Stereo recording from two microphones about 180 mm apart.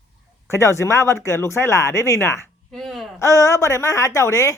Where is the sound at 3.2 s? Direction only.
15° left (ahead or behind).